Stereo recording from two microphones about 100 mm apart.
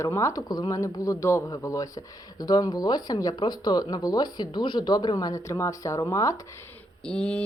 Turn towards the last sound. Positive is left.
turn(degrees=15)  # may be behind; listen again after turning